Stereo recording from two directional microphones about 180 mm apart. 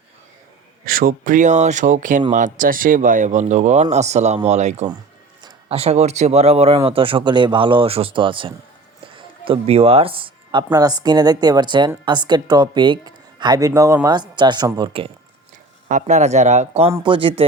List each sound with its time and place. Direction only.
0.9 s speech: 50° right (ahead or behind)
5.4 s a woman's voice: 30° right (ahead or behind)
15.9 s speech: 40° right (ahead or behind)
17.0 s a woman's voice: 30° right (ahead or behind)